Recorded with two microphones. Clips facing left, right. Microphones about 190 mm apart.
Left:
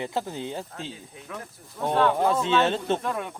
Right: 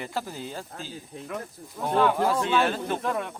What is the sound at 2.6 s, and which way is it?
Speech, 25° left (ahead or behind).